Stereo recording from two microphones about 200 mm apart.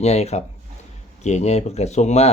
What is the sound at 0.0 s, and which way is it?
Speech, 35° left (ahead or behind).